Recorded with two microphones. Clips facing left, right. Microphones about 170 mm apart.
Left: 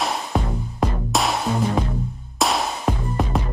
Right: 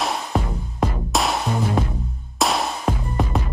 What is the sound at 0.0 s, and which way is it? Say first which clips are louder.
Music: even; centre (ahead or behind).